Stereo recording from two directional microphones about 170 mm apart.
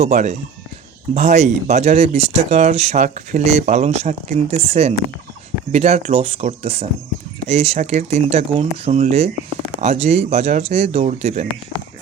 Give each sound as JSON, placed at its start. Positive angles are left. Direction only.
{"t": 0.0, "sound": "speech", "side_deg": -40}